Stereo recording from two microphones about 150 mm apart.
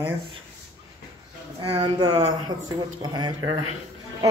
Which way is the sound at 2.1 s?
45° right (ahead or behind).